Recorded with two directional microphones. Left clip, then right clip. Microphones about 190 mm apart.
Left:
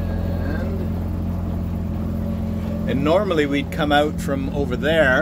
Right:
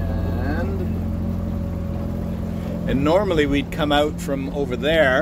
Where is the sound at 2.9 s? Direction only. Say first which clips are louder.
Even; centre (ahead or behind).